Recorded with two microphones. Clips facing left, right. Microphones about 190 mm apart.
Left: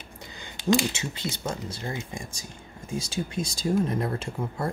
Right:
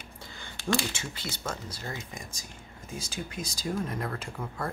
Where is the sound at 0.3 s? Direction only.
15° left (ahead or behind).